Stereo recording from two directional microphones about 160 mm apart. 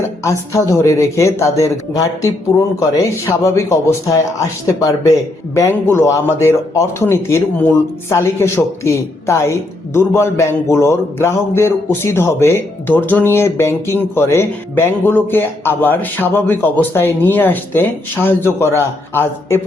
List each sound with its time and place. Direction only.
0.3 s a man's voice: 20° left (ahead or behind)